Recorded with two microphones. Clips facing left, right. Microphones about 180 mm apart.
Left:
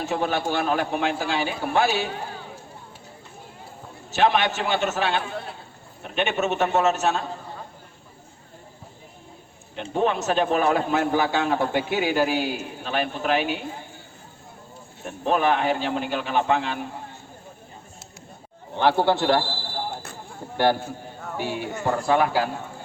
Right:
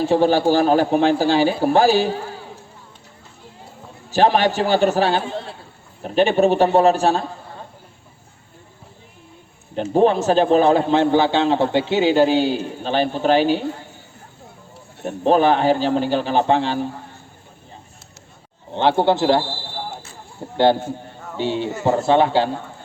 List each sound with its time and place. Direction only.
0.0 s a man's voice: 30° right (ahead or behind)
4.1 s a man's voice: 35° right (ahead or behind)
9.9 s a man's voice: 35° right (ahead or behind)
15.0 s a man's voice: 30° right (ahead or behind)
18.7 s a man's voice: 20° right (ahead or behind)
20.6 s a man's voice: 20° right (ahead or behind)